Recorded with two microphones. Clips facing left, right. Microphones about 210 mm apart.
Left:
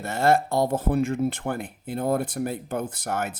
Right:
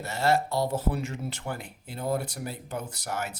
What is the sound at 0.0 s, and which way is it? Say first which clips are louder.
Speech: left 4 dB; 50° left (ahead or behind).